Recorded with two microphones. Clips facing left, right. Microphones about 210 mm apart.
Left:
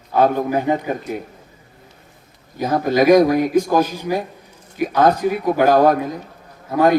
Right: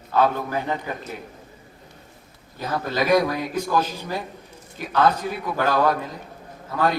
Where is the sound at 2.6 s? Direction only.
45° left (ahead or behind).